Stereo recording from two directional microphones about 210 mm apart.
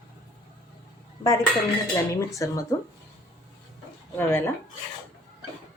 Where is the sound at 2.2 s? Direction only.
15° left (ahead or behind).